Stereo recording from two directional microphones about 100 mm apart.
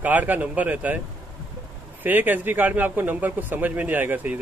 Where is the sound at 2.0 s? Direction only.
20° right (ahead or behind).